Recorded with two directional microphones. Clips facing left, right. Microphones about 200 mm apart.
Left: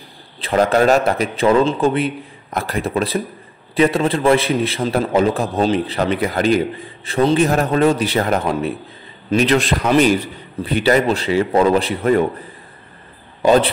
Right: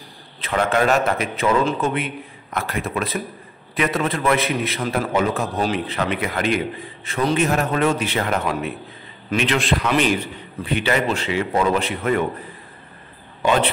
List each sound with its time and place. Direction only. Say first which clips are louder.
0.4 s a man's voice: left 5 dB; 35° left (ahead or behind)
13.4 s a man's voice: left 6 dB; 35° left (ahead or behind)